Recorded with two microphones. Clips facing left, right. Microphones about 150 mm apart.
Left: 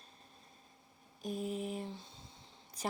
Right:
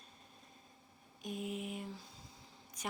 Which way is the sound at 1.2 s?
35° left (ahead or behind).